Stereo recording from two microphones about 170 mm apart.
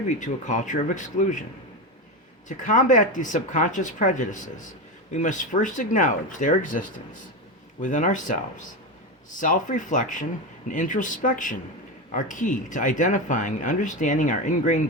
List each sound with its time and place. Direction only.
0.2 s speech: 45° left (ahead or behind)
2.5 s speech: 50° left (ahead or behind)